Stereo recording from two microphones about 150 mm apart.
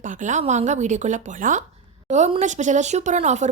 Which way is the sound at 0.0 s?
55° right (ahead or behind).